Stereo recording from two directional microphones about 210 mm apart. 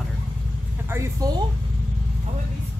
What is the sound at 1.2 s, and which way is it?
Speech, 15° right (ahead or behind).